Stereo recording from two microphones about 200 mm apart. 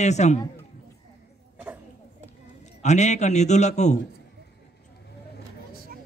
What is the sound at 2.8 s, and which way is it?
A man's voice, 35° left (ahead or behind).